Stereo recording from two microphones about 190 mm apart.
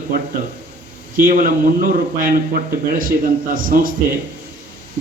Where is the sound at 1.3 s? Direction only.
45° right (ahead or behind).